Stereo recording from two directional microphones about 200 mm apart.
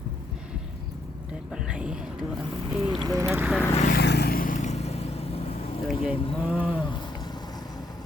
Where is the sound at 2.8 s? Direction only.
20° right (ahead or behind).